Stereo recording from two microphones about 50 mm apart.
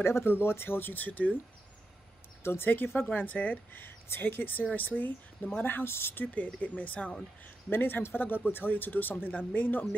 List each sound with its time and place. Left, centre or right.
0.0 s speech: left
2.4 s speech: left
3.2 s speech: left
6.2 s speech: left
7.7 s speech: left